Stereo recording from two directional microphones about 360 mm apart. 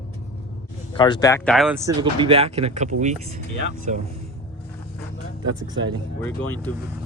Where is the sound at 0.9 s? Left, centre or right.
Centre.